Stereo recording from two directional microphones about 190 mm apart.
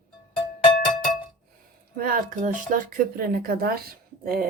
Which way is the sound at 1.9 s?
45° right (ahead or behind).